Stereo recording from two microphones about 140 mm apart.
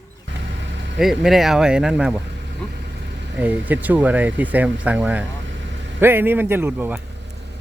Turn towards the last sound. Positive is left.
turn(degrees=-15)  # may be behind; listen again after turning